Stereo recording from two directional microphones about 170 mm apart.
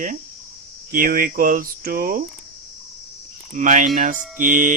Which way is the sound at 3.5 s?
50° right (ahead or behind).